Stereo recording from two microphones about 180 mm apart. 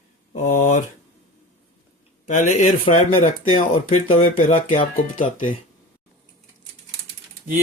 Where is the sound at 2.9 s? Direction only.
35° left (ahead or behind).